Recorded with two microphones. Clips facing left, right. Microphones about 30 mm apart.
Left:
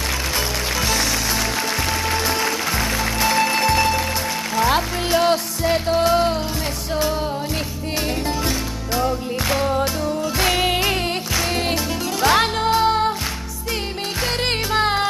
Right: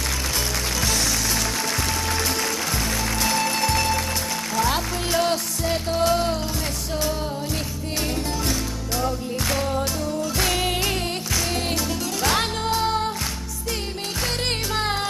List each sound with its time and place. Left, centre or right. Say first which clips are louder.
0.7 s music: left 4 dB; centre
2.0 s music: left 4 dB; centre
8.5 s music: left 3 dB; centre
14.7 s music: left 8 dB; left